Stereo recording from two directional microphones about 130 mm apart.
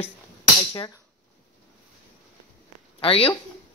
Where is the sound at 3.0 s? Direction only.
45° left (ahead or behind).